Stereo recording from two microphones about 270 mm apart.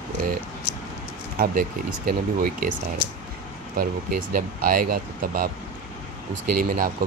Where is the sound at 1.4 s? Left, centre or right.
Right.